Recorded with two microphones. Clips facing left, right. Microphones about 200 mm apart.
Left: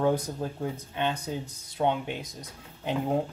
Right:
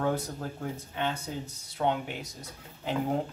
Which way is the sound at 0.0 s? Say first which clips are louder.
Left 4 dB; 15° left (ahead or behind).